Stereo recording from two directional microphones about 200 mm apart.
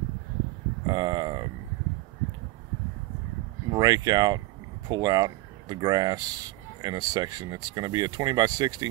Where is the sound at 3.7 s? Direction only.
20° right (ahead or behind).